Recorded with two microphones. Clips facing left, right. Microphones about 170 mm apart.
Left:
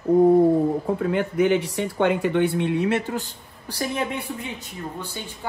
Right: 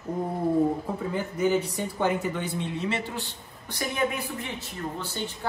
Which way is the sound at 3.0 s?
40° left (ahead or behind).